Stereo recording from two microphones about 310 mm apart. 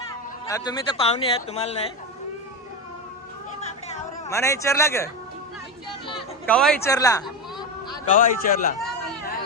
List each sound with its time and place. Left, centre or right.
0.4 s a man's voice: centre
4.3 s a man's voice: centre
6.5 s a man's voice: centre
8.1 s a man's voice: left